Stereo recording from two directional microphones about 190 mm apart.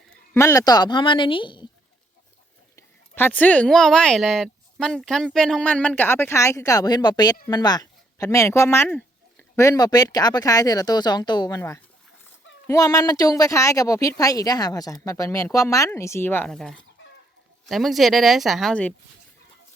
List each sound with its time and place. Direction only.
0.3 s speech: 15° left (ahead or behind)
2.7 s speech: 10° left (ahead or behind)